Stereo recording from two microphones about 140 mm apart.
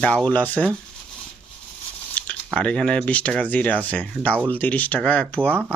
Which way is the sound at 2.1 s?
10° left (ahead or behind).